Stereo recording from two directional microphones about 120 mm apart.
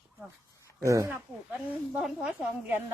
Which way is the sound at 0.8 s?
25° right (ahead or behind).